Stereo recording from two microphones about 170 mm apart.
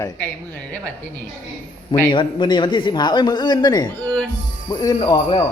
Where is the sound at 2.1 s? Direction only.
30° left (ahead or behind).